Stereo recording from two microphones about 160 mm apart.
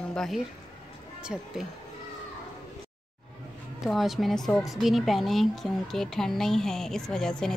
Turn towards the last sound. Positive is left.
turn(degrees=5)  # may be behind; listen again after turning